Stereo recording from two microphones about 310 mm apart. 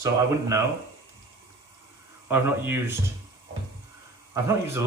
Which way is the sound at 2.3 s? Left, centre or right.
Centre.